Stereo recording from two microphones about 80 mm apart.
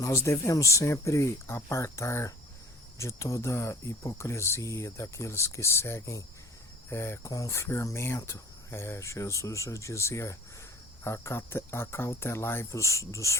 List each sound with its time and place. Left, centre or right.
0.0 s speech: left